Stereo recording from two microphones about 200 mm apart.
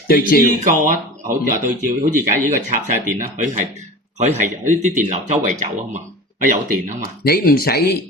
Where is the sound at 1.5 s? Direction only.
40° right (ahead or behind).